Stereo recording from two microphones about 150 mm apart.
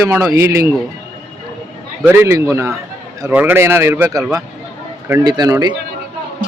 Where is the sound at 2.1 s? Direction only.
15° right (ahead or behind).